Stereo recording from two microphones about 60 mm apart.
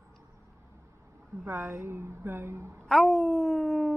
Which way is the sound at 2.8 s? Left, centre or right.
Centre.